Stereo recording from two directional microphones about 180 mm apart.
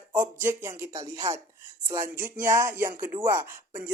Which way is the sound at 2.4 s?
15° right (ahead or behind).